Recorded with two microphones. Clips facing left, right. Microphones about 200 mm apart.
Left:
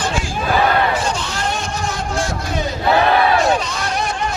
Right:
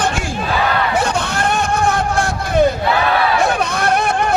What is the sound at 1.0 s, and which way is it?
Hubbub, 60° right (ahead or behind).